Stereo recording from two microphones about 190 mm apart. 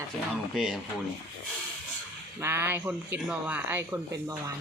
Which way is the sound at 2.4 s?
10° right (ahead or behind).